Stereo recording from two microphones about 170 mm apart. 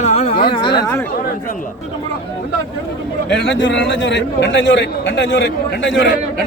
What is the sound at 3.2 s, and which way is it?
A man's voice, 90° left.